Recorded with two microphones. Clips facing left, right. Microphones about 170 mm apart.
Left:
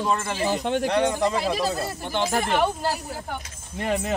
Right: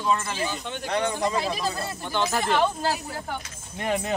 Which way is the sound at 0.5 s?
80° left.